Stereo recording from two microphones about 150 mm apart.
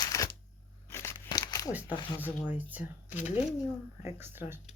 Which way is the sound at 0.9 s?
20° left (ahead or behind).